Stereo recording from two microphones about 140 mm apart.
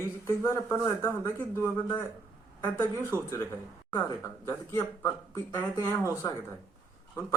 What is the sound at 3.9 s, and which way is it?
Speech, 20° left (ahead or behind).